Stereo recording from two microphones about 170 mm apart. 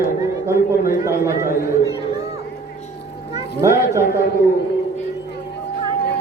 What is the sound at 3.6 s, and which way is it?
Speech, 15° right (ahead or behind).